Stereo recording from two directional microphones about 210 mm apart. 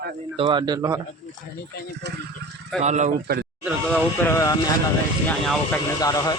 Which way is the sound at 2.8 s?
35° right (ahead or behind).